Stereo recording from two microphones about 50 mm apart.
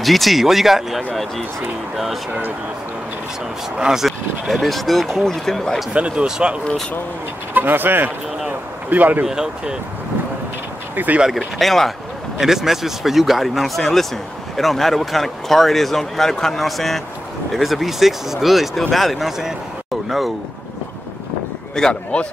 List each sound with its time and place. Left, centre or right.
0.0 s speech: centre
3.7 s speech: centre
4.5 s speech: centre
5.9 s speech: right
6.2 s speech: centre
7.5 s speech: right
8.5 s a sound: right
9.2 s speech: centre
11.0 s speech: right
11.3 s speech: centre
12.4 s speech: centre
21.8 s speech: centre